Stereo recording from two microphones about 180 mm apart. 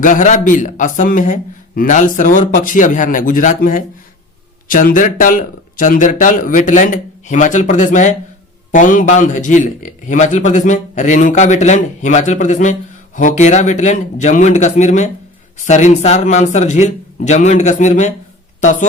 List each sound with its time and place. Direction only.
0.0 s a man's voice: 45° left (ahead or behind)